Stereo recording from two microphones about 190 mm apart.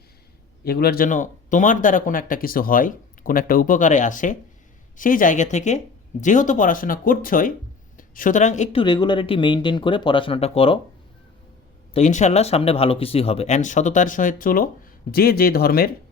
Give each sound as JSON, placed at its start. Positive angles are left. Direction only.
{"t": 0.6, "sound": "speech", "side_deg": 55}
{"t": 8.8, "sound": "speech", "side_deg": 25}
{"t": 11.9, "sound": "speech", "side_deg": 40}